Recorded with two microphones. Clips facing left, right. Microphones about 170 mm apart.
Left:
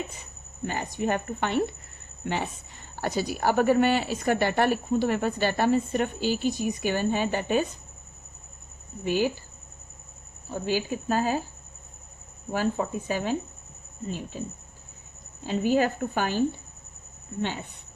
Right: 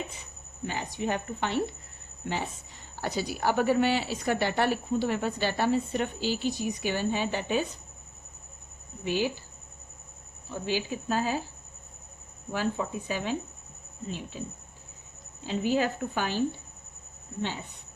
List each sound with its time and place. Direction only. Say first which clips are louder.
0.6 s a woman's voice: left 3 dB; 50° left (ahead or behind)
2.2 s speech: left 3 dB; 65° left (ahead or behind)
2.9 s a woman's voice: left 3 dB; 50° left (ahead or behind)
9.0 s a woman's voice: left 3 dB; 45° left (ahead or behind)
10.5 s a woman's voice: left 3 dB; 45° left (ahead or behind)
12.5 s a woman's voice: left 3 dB; 45° left (ahead or behind)
15.4 s a woman's voice: left 3 dB; 50° left (ahead or behind)